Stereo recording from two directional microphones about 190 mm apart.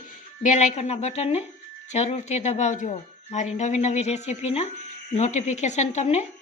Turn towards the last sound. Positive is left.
turn(degrees=35)  # may be behind; listen again after turning